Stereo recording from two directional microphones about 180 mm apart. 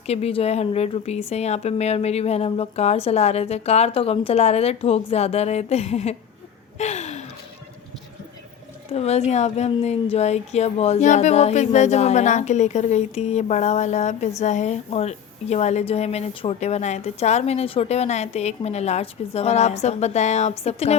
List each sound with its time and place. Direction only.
0.1 s a woman's voice: 35° left (ahead or behind)
6.7 s a sound: 40° left (ahead or behind)
8.9 s a woman's voice: 35° left (ahead or behind)